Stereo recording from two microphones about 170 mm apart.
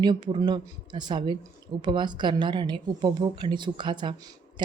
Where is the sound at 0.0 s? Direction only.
25° right (ahead or behind).